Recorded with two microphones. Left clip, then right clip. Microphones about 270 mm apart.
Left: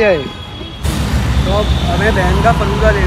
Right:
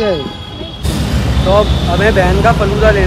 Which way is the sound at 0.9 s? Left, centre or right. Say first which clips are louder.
Right 1 dB; centre.